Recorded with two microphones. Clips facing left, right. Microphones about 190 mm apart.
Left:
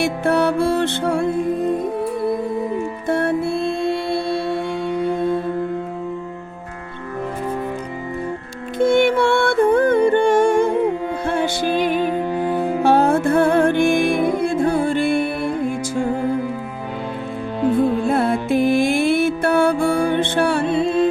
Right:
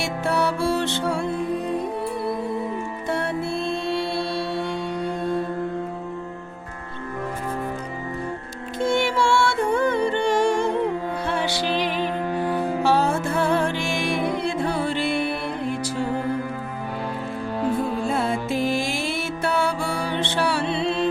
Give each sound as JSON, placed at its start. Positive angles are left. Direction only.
{"t": 0.0, "sound": "music", "side_deg": 55}
{"t": 3.1, "sound": "music", "side_deg": 55}
{"t": 8.8, "sound": "music", "side_deg": 60}
{"t": 18.0, "sound": "music", "side_deg": 60}